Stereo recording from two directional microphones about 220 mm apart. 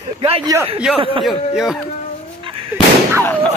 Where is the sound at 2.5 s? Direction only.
25° right (ahead or behind).